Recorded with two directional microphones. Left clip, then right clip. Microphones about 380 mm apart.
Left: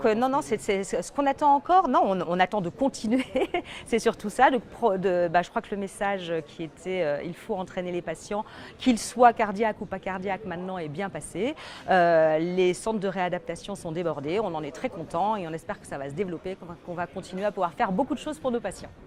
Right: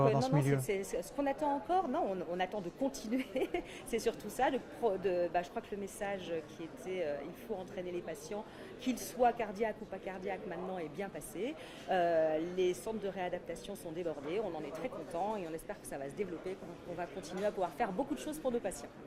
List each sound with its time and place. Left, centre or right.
0.7 s a woman's voice: left